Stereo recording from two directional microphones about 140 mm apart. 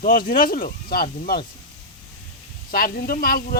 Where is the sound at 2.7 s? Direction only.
90° left.